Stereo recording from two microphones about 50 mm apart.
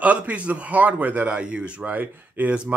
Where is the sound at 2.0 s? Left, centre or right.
Right.